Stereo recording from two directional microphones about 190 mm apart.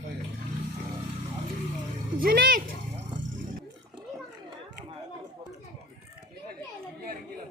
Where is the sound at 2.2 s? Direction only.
50° right (ahead or behind).